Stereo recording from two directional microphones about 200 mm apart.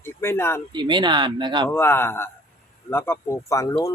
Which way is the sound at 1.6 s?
10° left (ahead or behind).